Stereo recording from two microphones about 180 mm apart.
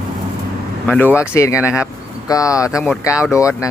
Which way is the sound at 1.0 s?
10° left (ahead or behind).